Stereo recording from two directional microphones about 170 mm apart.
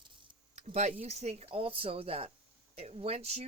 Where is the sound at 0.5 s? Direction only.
40° right (ahead or behind).